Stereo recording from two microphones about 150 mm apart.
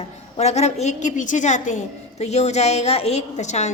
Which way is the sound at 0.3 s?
45° left (ahead or behind).